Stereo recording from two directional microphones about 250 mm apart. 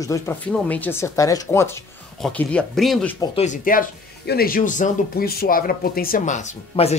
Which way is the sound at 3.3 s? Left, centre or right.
Left.